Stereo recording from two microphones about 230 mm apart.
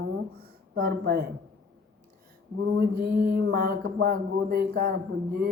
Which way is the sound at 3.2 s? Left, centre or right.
Right.